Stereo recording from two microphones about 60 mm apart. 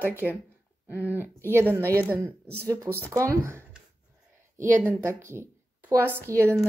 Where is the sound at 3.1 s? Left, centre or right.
Right.